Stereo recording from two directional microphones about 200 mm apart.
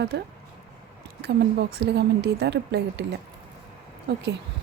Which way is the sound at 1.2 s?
55° right (ahead or behind).